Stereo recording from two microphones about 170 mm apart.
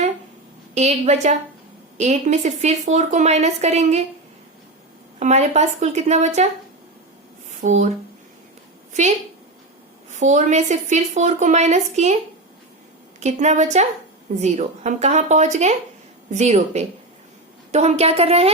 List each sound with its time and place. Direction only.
0.7 s a woman's voice: 40° right (ahead or behind)
5.2 s a woman's voice: 40° right (ahead or behind)
7.6 s a woman's voice: 45° right (ahead or behind)
8.9 s a woman's voice: 45° right (ahead or behind)
10.2 s a woman's voice: 45° right (ahead or behind)
13.1 s a woman's voice: 40° right (ahead or behind)